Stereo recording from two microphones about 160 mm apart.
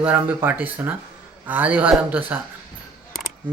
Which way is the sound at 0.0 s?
10° right (ahead or behind).